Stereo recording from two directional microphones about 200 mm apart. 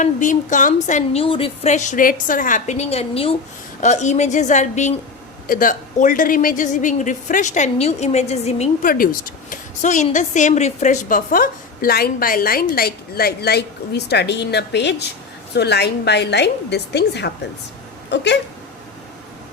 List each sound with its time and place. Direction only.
0.0 s a woman's voice: 40° left (ahead or behind); by 18.3 s 60° left (ahead or behind)